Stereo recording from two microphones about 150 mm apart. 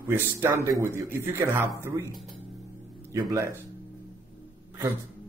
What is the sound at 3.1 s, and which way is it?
Speech, 20° right (ahead or behind).